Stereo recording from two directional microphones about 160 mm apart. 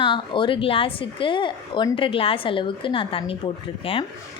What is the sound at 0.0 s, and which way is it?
Speech, 30° left (ahead or behind).